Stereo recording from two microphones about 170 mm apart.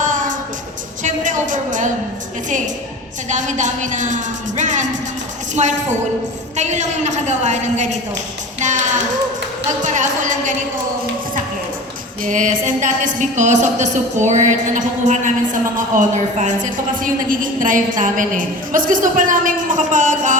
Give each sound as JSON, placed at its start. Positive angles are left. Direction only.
{"t": 0.0, "sound": "music", "side_deg": -50}
{"t": 1.0, "sound": "a sound", "side_deg": -50}
{"t": 3.2, "sound": "a man's voice", "side_deg": -45}
{"t": 12.2, "sound": "a man's voice", "side_deg": -50}